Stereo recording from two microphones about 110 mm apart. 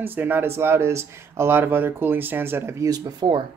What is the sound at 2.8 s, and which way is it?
Speech, 45° right (ahead or behind).